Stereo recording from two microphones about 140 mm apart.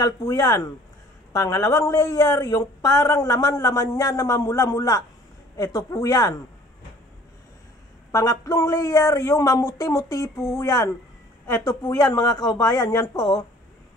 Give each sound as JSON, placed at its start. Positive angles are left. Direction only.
{"t": 0.0, "sound": "a woman's voice", "side_deg": 25}
{"t": 8.1, "sound": "a woman's voice", "side_deg": 20}